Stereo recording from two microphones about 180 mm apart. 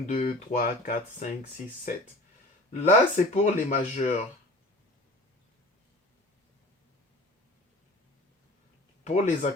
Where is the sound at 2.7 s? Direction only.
45° left (ahead or behind).